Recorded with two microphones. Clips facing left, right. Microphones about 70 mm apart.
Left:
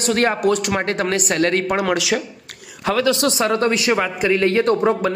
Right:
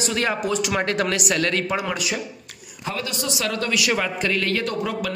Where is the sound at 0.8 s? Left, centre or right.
Left.